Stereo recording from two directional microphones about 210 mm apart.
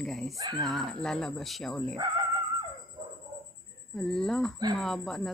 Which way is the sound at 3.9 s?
Centre (ahead or behind).